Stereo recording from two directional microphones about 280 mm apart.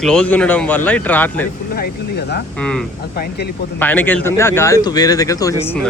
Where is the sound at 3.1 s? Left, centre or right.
Left.